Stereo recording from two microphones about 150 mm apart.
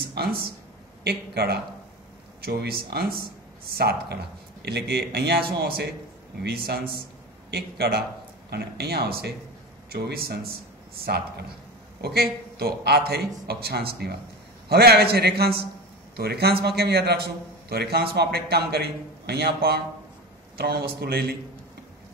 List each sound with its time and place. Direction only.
0.1 s a man's voice: 90° right